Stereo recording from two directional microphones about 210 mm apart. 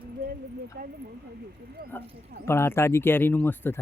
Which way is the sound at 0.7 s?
45° right (ahead or behind).